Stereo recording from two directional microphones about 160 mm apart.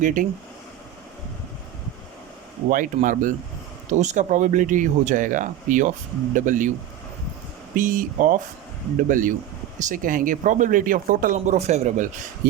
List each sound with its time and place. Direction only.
0.0 s speech: 55° right (ahead or behind)
2.6 s speech: 55° right (ahead or behind)
7.8 s speech: 55° right (ahead or behind)